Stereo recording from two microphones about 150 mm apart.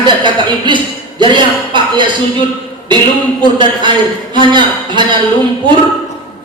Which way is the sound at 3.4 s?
30° right (ahead or behind).